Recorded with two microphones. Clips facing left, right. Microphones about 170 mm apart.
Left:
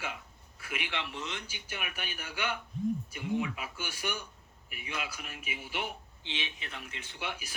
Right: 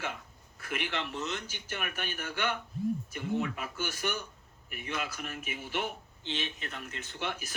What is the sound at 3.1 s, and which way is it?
Speech, 45° right (ahead or behind).